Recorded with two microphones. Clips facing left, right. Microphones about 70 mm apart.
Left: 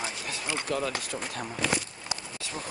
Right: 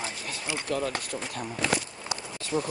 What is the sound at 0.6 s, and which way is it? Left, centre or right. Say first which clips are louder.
Speech: right 1 dB; left.